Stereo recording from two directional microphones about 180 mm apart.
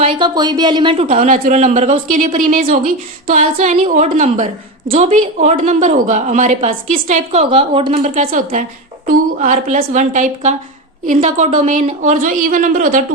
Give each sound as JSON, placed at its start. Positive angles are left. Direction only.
{"t": 0.0, "sound": "speech", "side_deg": -25}
{"t": 8.3, "sound": "a woman's voice", "side_deg": -50}